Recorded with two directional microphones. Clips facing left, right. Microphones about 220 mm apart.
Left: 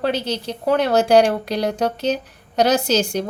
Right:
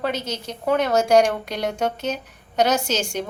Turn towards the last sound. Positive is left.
turn(degrees=35)  # may be behind; listen again after turning